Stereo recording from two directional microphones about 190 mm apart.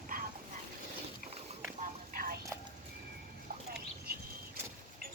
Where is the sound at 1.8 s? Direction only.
50° right (ahead or behind).